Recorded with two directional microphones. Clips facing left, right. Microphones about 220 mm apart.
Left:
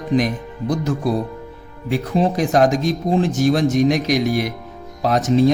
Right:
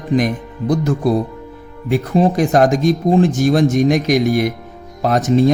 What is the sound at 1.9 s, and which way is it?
Speech, 50° right (ahead or behind).